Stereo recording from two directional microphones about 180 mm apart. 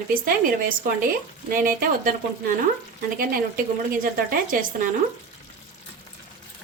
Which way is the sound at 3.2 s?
50° right (ahead or behind).